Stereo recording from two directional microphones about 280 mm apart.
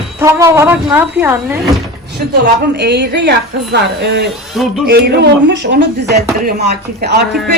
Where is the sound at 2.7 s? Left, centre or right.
Right.